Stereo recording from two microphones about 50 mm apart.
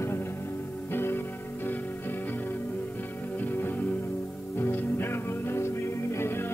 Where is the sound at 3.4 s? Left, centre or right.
Left.